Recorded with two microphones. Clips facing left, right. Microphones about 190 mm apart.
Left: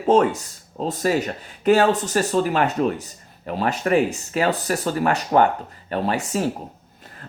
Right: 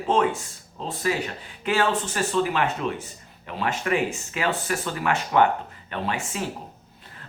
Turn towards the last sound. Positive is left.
turn(degrees=40)  # may be behind; listen again after turning